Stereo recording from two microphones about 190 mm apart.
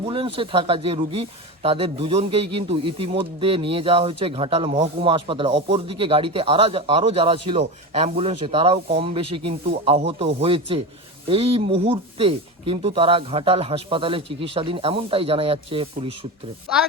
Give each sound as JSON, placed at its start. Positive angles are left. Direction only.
{"t": 0.0, "sound": "speech", "side_deg": -30}